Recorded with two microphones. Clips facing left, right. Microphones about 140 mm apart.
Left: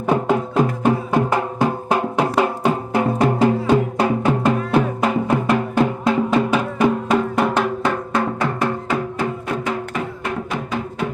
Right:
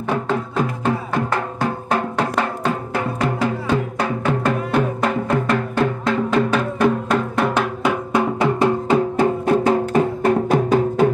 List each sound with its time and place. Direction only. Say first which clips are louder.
0.8 s music: left 3 dB; 15° left (ahead or behind)
4.5 s music: even; 5° left (ahead or behind); by 11.1 s 40° right (ahead or behind)